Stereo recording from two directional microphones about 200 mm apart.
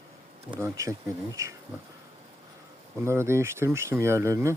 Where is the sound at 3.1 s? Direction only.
15° right (ahead or behind).